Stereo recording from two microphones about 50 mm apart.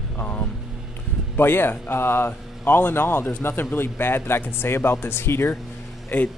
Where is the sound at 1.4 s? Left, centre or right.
Left.